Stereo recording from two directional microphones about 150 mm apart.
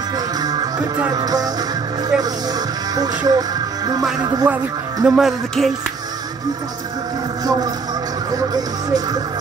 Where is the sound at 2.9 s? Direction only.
25° right (ahead or behind).